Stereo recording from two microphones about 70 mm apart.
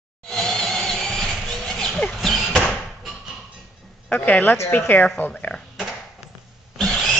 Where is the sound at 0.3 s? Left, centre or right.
Centre.